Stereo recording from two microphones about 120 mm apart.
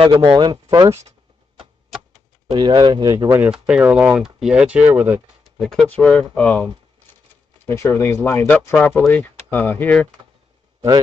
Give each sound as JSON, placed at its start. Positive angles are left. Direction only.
{"t": 0.0, "sound": "speech", "side_deg": -45}
{"t": 2.5, "sound": "speech", "side_deg": -40}
{"t": 3.3, "sound": "speech", "side_deg": -10}
{"t": 5.4, "sound": "a sound", "side_deg": 0}
{"t": 5.9, "sound": "speech", "side_deg": 10}
{"t": 7.7, "sound": "speech", "side_deg": 20}